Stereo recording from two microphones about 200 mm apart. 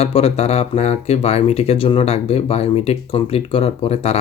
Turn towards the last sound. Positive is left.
turn(degrees=30)  # may be behind; listen again after turning